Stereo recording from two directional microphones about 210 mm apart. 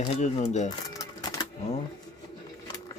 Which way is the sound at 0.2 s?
35° left (ahead or behind).